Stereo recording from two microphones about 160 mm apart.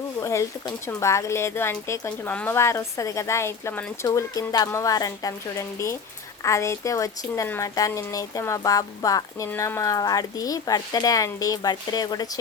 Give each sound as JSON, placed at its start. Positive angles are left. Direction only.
{"t": 0.2, "sound": "a woman's voice", "side_deg": 20}